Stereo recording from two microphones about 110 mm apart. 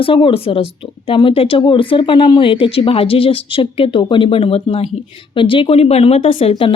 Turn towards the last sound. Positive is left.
turn(degrees=55)  # may be behind; listen again after turning